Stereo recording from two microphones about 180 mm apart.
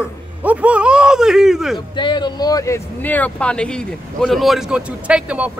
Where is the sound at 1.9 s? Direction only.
25° left (ahead or behind).